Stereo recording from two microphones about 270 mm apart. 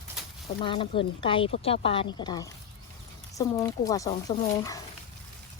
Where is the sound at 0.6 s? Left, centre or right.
Centre.